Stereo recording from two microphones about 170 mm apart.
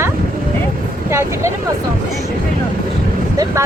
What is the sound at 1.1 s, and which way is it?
Speech, 15° right (ahead or behind).